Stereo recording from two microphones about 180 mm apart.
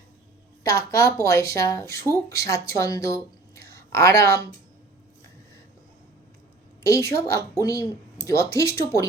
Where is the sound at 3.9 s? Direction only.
15° left (ahead or behind).